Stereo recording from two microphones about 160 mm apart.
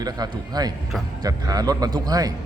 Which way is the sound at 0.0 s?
25° right (ahead or behind).